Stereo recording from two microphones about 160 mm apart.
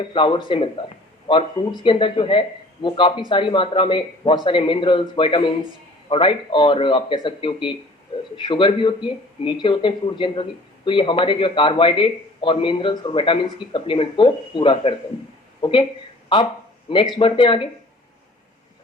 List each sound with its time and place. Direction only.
0.0 s a man's voice: 30° left (ahead or behind)
16.9 s a man's voice: 30° left (ahead or behind)